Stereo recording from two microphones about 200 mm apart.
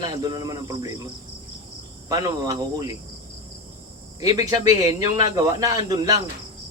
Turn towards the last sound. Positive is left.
turn(degrees=-15)  # may be behind; listen again after turning